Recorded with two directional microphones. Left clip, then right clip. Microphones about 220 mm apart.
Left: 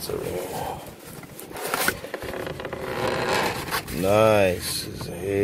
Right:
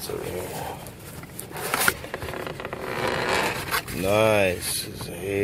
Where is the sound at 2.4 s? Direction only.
20° left (ahead or behind).